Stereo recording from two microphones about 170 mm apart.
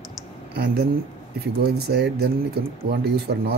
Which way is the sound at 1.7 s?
75° right (ahead or behind).